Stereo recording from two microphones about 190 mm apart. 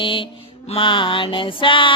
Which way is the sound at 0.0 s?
25° left (ahead or behind).